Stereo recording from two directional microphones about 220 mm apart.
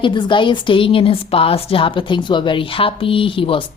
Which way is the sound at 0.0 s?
20° left (ahead or behind).